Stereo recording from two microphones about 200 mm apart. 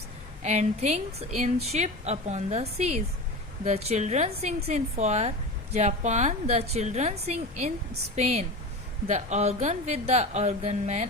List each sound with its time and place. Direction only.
0.4 s speech: 35° right (ahead or behind)